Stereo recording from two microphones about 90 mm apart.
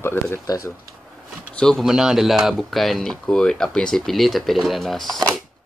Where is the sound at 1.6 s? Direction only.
5° left (ahead or behind).